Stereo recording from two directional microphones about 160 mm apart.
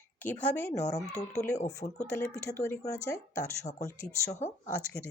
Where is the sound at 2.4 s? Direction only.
20° left (ahead or behind).